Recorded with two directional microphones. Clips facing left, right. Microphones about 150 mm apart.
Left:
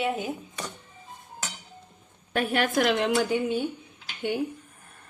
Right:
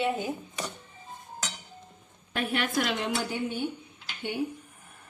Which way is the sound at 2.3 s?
40° left (ahead or behind).